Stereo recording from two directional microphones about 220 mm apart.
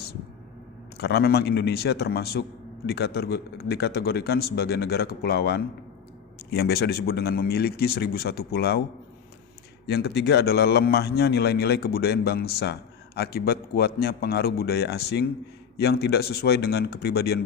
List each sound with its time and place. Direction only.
0.9 s a man's voice: 45° left (ahead or behind)
9.8 s a man's voice: 50° left (ahead or behind)